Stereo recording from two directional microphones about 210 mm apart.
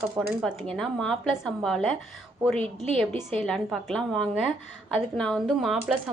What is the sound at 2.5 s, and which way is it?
Speech, 30° right (ahead or behind).